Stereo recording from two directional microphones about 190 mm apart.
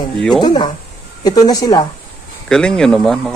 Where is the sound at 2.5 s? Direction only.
5° left (ahead or behind).